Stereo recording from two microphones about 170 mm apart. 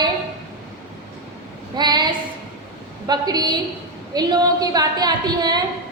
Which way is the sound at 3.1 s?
25° right (ahead or behind).